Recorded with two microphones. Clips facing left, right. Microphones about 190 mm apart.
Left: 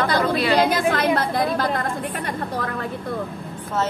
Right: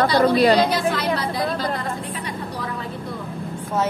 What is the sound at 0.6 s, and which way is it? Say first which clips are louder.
A woman's voice: left 2 dB; 50° left (ahead or behind).